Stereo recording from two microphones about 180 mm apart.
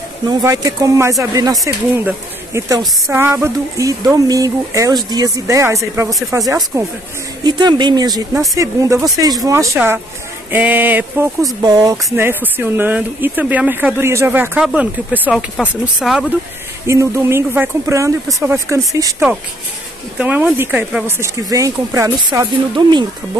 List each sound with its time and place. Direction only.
0.3 s speech: 20° right (ahead or behind)
11.6 s speech: 20° right (ahead or behind); by 16.3 s 5° right (ahead or behind)
16.8 s speech: 15° right (ahead or behind)
20.2 s speech: 10° right (ahead or behind)